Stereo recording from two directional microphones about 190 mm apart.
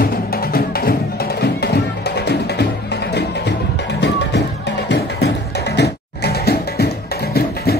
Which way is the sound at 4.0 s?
65° left (ahead or behind).